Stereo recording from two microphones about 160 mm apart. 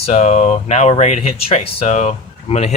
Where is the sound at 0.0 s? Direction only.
45° left (ahead or behind).